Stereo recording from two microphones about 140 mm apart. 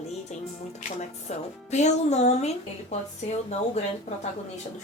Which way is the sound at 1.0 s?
55° left (ahead or behind).